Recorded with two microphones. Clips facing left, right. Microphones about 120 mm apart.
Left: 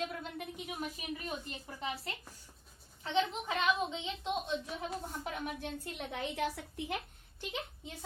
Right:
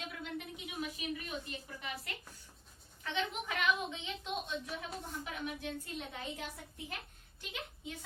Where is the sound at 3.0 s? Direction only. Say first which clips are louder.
Left 5 dB; 25° left (ahead or behind).